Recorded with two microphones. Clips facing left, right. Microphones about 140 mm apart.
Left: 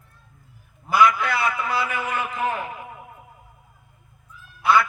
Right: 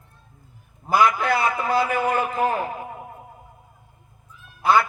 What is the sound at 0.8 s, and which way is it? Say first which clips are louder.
A man's voice: even; 40° right (ahead or behind).